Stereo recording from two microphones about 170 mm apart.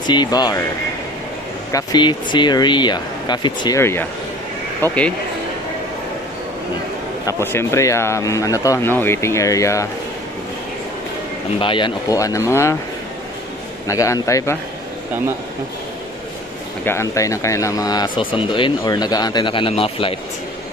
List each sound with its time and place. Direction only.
0.0 s speech: 25° left (ahead or behind)
1.7 s speech: 20° left (ahead or behind)
7.2 s speech: 15° left (ahead or behind)
11.6 s speech: 30° left (ahead or behind)
13.8 s speech: 20° left (ahead or behind)
16.8 s speech: 15° left (ahead or behind); by 20.2 s 35° left (ahead or behind)